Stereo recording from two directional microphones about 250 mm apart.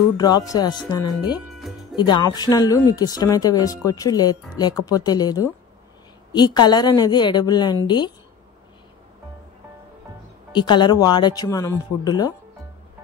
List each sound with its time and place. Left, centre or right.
0.2 s speech: centre
1.4 s music: centre
2.0 s speech: centre
10.5 s speech: centre